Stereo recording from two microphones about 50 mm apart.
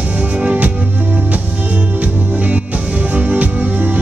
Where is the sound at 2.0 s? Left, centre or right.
Right.